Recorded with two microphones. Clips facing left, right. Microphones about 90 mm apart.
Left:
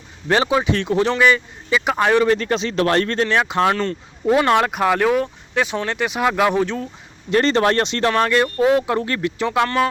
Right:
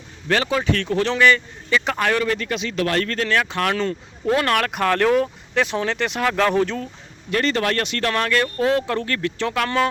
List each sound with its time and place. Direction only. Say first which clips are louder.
0.3 s speech: left 3 dB; 20° left (ahead or behind)
2.3 s speech: left 5 dB; 35° left (ahead or behind); by 6.8 s 5° left (ahead or behind)
7.3 s speech: left 5 dB; 30° left (ahead or behind); by 9.6 s 15° left (ahead or behind)